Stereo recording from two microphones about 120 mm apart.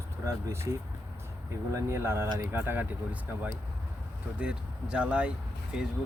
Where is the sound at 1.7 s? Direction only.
20° right (ahead or behind).